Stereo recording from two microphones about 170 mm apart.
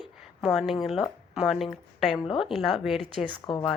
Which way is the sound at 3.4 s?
20° left (ahead or behind).